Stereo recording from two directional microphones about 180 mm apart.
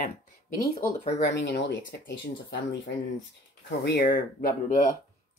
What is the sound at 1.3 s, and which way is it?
Speech, 75° left (ahead or behind).